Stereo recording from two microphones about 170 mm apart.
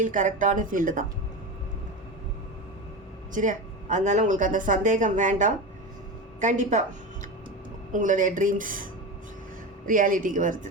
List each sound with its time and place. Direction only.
0.0 s speech: 50° right (ahead or behind)
3.3 s speech: 50° right (ahead or behind)